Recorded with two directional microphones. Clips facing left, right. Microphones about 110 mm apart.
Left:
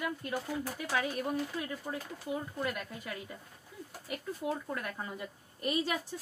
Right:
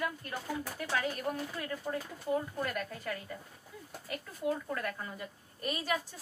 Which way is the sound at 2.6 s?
15° left (ahead or behind).